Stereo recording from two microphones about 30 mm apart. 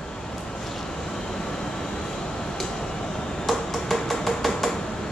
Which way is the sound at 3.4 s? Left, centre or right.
Centre.